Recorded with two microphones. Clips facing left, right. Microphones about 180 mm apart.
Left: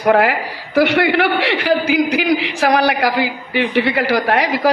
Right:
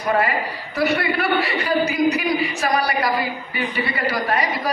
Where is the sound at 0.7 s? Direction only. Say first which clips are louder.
Left 7 dB; 90° left.